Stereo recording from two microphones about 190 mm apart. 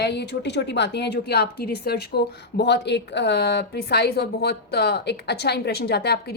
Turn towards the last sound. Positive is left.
turn(degrees=60)  # may be behind; listen again after turning